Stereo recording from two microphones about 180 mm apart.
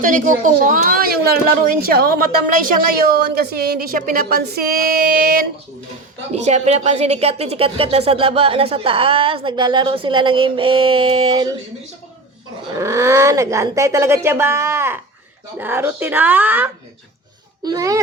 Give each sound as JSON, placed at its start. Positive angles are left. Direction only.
{"t": 0.0, "sound": "a woman's voice", "side_deg": -45}
{"t": 6.3, "sound": "speech", "side_deg": -40}
{"t": 12.8, "sound": "speech", "side_deg": -15}
{"t": 17.6, "sound": "a child's voice", "side_deg": -20}